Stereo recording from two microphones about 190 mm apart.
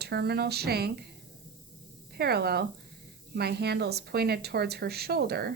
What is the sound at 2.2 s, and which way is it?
A woman's voice, 55° right (ahead or behind).